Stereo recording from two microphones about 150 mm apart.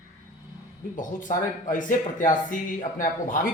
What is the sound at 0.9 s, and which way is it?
Speech, 60° left (ahead or behind).